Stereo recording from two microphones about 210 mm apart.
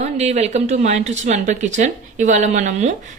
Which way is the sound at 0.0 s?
30° right (ahead or behind).